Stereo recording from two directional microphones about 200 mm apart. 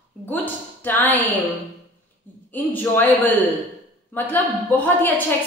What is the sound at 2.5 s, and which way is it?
A woman's voice, 10° left (ahead or behind).